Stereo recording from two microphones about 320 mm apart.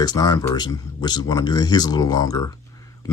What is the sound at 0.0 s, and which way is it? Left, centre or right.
Speech, centre.